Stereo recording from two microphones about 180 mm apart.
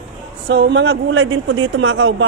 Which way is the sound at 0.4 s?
80° right.